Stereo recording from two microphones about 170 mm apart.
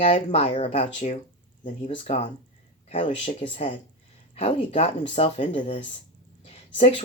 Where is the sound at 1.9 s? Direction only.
35° left (ahead or behind).